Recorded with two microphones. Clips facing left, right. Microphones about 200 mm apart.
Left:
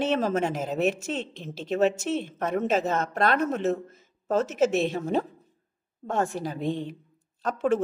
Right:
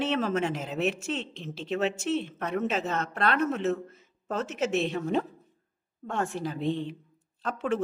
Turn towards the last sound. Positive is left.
turn(degrees=45)  # may be behind; listen again after turning